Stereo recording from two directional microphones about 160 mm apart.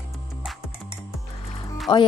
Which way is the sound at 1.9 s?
25° left (ahead or behind).